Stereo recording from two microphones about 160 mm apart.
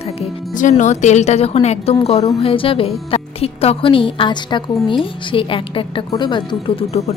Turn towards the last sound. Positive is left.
turn(degrees=40)  # may be behind; listen again after turning